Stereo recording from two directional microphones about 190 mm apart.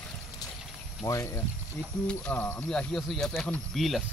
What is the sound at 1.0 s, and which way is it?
Speech, 15° left (ahead or behind).